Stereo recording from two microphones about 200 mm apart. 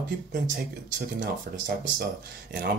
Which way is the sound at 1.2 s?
60° right (ahead or behind).